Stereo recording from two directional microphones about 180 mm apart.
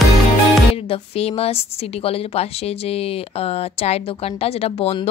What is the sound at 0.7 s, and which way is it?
A woman's voice, 30° left (ahead or behind).